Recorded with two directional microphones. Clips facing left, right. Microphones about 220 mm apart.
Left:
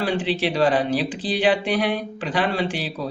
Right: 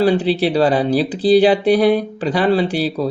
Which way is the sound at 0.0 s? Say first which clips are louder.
Right 8 dB; 35° right (ahead or behind).